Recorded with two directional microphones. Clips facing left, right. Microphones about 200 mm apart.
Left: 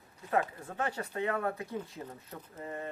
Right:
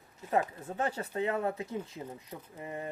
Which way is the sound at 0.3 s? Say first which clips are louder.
Right 1 dB; 20° right (ahead or behind).